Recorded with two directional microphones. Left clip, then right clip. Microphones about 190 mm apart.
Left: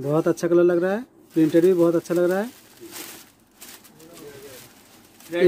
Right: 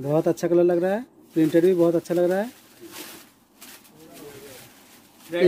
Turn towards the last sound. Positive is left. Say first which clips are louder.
# left 1 dB
turn(degrees=0)  # may be behind; listen again after turning